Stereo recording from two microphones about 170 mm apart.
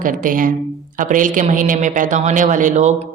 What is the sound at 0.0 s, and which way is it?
Speech, 55° right (ahead or behind).